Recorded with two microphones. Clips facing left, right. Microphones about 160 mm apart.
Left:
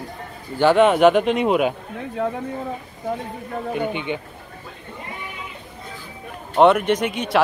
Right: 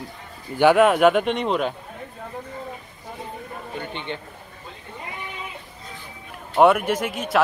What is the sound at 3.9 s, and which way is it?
Speech, 10° left (ahead or behind).